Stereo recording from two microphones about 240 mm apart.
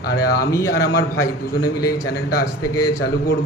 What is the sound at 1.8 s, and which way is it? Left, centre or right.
Speech, centre.